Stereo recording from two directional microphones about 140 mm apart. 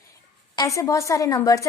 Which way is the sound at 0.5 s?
25° left (ahead or behind).